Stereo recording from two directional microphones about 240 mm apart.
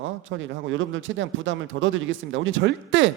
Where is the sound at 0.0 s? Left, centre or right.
Right.